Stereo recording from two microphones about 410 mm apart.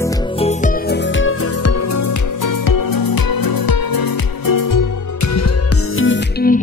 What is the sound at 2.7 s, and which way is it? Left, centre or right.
Music, left.